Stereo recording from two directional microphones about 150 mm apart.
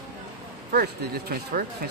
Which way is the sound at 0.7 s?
90° right.